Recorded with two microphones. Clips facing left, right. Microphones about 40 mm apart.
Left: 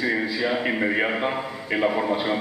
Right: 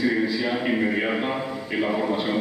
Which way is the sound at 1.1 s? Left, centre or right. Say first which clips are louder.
Even; centre.